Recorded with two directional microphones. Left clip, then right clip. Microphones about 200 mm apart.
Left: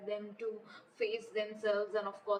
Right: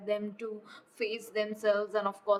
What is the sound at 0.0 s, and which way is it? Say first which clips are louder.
A woman's voice: right 5 dB; 55° right (ahead or behind).